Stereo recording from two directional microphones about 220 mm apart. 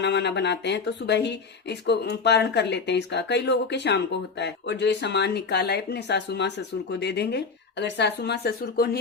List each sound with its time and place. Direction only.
0.0 s speech: 50° left (ahead or behind)